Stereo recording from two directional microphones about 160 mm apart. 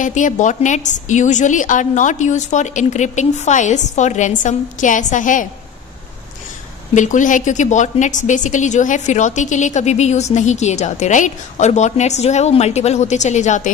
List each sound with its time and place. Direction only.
0.0 s a woman's voice: 50° left (ahead or behind)
6.9 s a woman's voice: 50° left (ahead or behind)